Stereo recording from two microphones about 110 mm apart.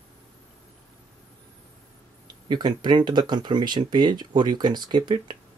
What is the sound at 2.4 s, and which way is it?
Speech, 40° right (ahead or behind).